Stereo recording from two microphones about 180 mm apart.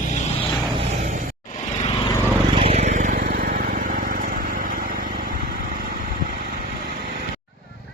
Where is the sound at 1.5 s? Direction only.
35° left (ahead or behind).